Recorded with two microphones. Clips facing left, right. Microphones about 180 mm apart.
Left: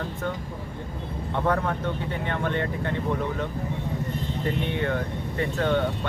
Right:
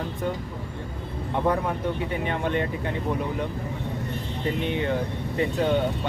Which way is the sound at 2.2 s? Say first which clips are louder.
Even; 15° right (ahead or behind).